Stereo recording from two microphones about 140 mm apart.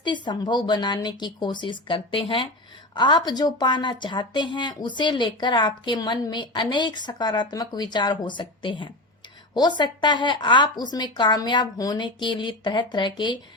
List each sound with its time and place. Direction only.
0.0 s a woman's voice: 35° left (ahead or behind)